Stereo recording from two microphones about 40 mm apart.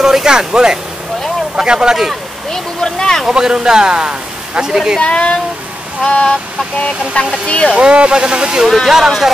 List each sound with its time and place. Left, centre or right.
0.0 s speech: centre
2.5 s speech: centre
3.3 s speech: centre
5.0 s speech: left
7.4 s speech: left
7.7 s speech: right
8.6 s speech: centre